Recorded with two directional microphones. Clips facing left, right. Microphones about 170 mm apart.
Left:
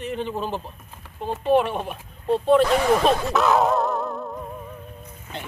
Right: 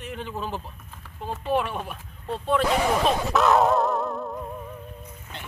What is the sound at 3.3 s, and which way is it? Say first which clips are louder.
Dog: even; centre (ahead or behind).